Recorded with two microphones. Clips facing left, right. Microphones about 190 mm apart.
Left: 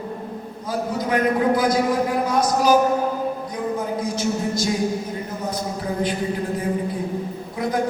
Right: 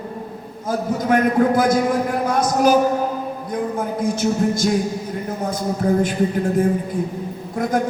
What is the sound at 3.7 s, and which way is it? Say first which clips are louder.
Speech: right 3 dB; 50° right (ahead or behind).